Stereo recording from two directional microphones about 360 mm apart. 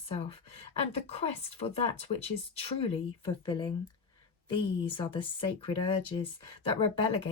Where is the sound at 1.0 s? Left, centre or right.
Centre.